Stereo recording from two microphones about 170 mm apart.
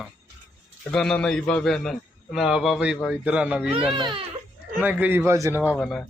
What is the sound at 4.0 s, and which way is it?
Speech, 30° right (ahead or behind).